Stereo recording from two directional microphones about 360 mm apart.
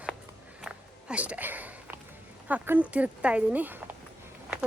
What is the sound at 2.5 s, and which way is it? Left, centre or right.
A woman's voice, centre.